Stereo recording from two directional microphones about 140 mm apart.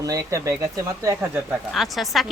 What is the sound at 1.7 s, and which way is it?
Speech, centre (ahead or behind).